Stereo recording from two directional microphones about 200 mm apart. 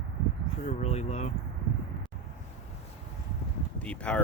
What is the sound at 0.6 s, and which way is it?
Speech, 30° left (ahead or behind).